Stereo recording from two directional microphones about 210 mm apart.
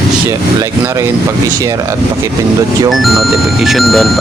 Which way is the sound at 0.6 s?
10° right (ahead or behind).